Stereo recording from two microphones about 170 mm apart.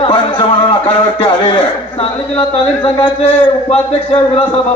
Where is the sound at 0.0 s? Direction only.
30° left (ahead or behind).